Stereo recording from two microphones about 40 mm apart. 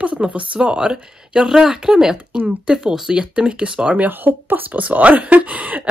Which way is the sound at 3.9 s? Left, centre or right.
Right.